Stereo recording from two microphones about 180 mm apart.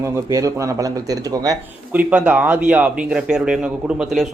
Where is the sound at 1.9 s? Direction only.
10° right (ahead or behind).